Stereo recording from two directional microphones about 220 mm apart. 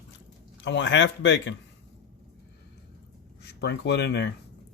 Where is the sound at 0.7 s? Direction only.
55° left (ahead or behind).